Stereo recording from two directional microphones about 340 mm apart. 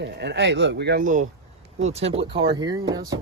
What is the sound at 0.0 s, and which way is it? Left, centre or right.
Speech, right.